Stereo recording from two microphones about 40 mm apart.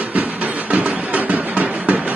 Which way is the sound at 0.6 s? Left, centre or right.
Right.